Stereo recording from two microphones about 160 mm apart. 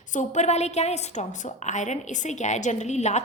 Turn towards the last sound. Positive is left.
turn(degrees=45)  # may be behind; listen again after turning